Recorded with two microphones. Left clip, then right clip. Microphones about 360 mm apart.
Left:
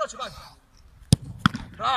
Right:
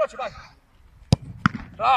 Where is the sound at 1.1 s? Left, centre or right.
Centre.